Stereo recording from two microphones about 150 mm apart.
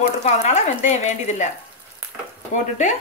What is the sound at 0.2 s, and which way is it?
Speech, 50° left (ahead or behind).